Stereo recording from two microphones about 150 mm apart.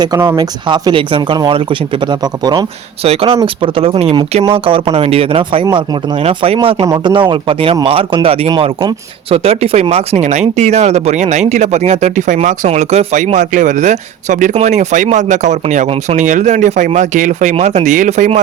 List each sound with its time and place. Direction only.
0.0 s speech: 25° right (ahead or behind)
3.0 s speech: 40° right (ahead or behind)
6.8 s speech: 30° right (ahead or behind); by 18.3 s 60° right (ahead or behind)